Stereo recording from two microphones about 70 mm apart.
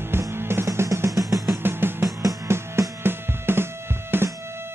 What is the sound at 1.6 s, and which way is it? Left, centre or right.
Music, right.